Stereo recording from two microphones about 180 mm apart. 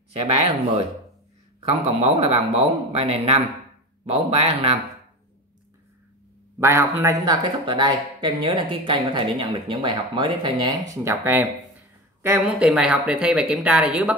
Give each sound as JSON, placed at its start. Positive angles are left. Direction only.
{"t": 1.6, "sound": "speech", "side_deg": -35}
{"t": 6.6, "sound": "a man's voice", "side_deg": -15}
{"t": 11.1, "sound": "speech", "side_deg": -10}